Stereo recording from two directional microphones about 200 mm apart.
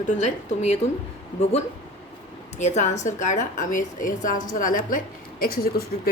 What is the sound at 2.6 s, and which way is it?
A woman's voice, 35° left (ahead or behind).